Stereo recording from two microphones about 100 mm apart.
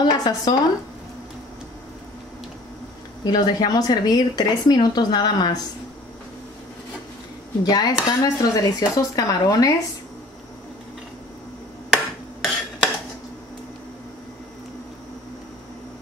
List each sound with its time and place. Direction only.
0.0 s speech: 50° left (ahead or behind)
3.3 s speech: 40° left (ahead or behind)
7.6 s speech: 40° left (ahead or behind)
11.9 s a sound: 5° right (ahead or behind)